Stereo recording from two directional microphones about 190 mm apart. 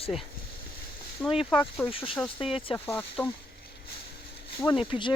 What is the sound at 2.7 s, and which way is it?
Speech, 10° left (ahead or behind).